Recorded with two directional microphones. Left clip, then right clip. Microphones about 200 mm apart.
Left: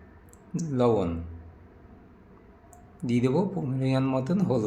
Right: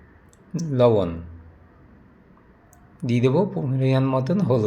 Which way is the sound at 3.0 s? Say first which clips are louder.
Right 5 dB; 20° right (ahead or behind).